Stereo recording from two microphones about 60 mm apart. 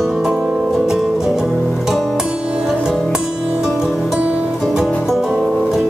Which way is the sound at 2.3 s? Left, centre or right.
Centre.